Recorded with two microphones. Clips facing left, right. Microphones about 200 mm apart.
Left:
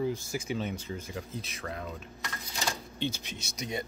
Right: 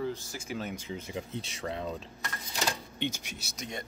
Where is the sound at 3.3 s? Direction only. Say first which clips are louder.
Left 3 dB; 60° right (ahead or behind).